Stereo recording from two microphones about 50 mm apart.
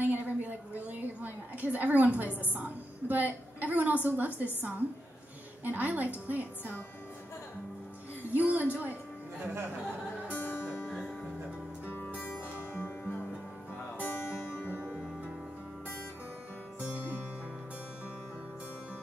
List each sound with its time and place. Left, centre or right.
0.0 s a sound: right
2.5 s a woman's voice: right
8.3 s a woman's voice: right
10.7 s music: centre
12.0 s music: left
14.8 s music: right